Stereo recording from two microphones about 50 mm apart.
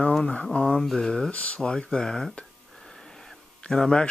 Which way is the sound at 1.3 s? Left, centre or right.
Left.